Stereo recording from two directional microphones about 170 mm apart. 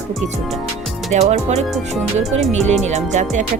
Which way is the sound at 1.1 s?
40° right (ahead or behind).